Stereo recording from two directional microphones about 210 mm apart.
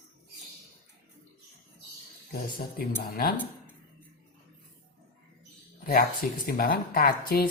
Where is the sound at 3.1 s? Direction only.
45° left (ahead or behind).